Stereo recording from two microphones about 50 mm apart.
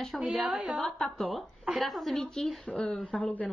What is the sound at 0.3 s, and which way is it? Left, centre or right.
Speech, centre.